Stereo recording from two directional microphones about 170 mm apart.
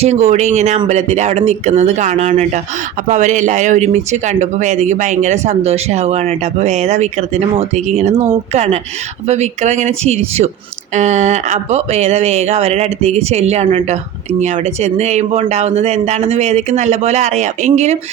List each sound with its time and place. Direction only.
0.0 s speech: 40° right (ahead or behind)